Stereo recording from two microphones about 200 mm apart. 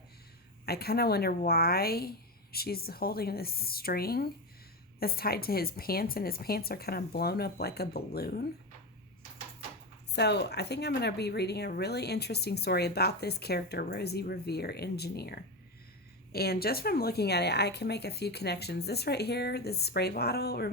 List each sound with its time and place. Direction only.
0.6 s speech: 50° left (ahead or behind)
10.1 s speech: 55° left (ahead or behind)